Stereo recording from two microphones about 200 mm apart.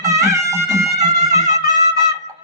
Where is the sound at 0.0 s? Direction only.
15° right (ahead or behind).